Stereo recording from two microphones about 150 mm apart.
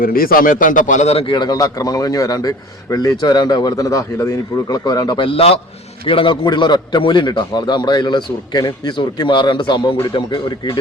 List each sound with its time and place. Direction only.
0.0 s a man's voice: 75° left (ahead or behind); by 1.2 s 50° left (ahead or behind)
1.3 s a man's voice: 30° left (ahead or behind)